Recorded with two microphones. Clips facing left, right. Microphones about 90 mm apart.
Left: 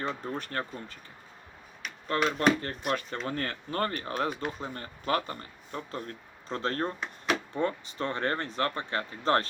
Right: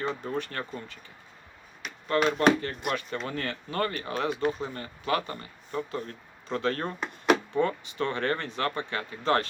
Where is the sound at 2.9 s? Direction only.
40° left (ahead or behind).